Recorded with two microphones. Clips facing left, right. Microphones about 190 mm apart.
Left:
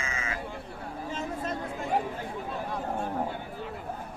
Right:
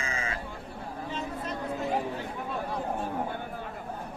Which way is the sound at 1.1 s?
45° left (ahead or behind).